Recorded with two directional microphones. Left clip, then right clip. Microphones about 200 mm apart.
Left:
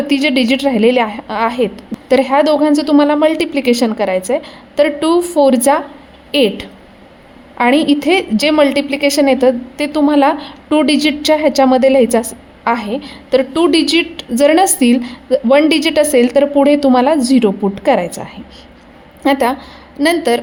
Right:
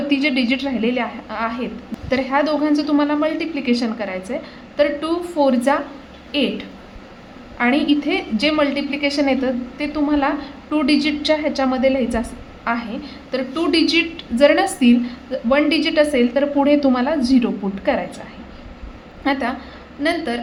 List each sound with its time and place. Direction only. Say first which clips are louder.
0.1 s a woman's voice: left 5 dB; 50° left (ahead or behind)
19.2 s a woman's voice: left 8 dB; 50° left (ahead or behind)